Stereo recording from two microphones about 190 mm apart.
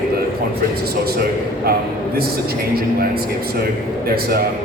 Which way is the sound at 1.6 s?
55° right (ahead or behind).